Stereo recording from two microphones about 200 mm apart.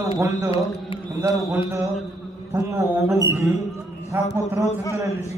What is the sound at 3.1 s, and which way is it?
A man's voice, 15° right (ahead or behind).